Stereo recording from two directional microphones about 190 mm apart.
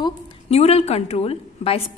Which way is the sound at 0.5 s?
35° left (ahead or behind).